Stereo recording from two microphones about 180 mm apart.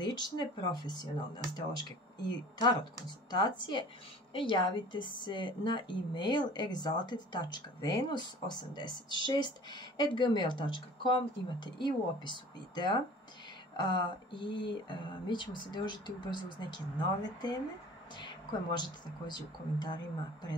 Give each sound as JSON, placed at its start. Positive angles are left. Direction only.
{"t": 0.0, "sound": "speech", "side_deg": 25}